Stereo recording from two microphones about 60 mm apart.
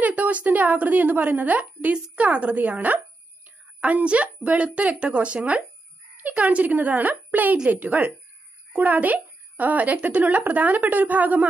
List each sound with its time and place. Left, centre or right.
0.0 s a woman's voice: right